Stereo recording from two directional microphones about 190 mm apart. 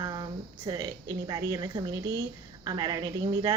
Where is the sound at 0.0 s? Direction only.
20° right (ahead or behind).